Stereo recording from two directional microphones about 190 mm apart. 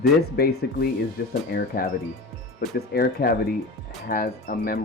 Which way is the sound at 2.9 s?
55° left (ahead or behind).